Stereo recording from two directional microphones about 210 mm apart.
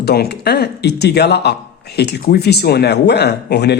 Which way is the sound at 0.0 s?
50° left (ahead or behind).